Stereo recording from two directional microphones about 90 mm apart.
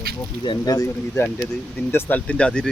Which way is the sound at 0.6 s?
40° left (ahead or behind).